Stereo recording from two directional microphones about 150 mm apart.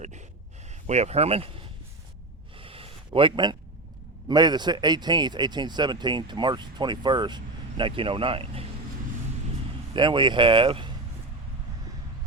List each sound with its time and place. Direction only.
0.9 s speech: 45° right (ahead or behind)
2.6 s a sound: 40° right (ahead or behind)
4.3 s speech: 30° right (ahead or behind)
9.9 s speech: 35° right (ahead or behind)